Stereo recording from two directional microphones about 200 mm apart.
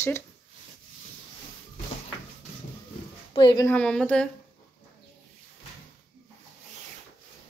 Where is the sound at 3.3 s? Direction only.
20° left (ahead or behind).